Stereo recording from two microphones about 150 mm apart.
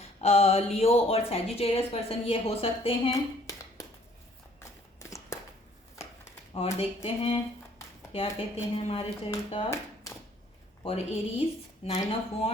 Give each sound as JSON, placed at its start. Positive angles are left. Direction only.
{"t": 0.0, "sound": "speech", "side_deg": 40}
{"t": 4.9, "sound": "a sound", "side_deg": 20}
{"t": 6.5, "sound": "speech", "side_deg": 40}
{"t": 10.8, "sound": "speech", "side_deg": 40}